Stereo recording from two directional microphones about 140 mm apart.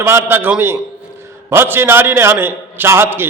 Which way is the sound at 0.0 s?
15° right (ahead or behind).